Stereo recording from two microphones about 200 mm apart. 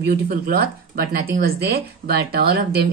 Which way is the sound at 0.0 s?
50° right (ahead or behind).